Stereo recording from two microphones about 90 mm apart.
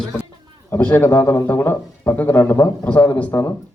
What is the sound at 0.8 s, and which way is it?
Speech, 20° left (ahead or behind).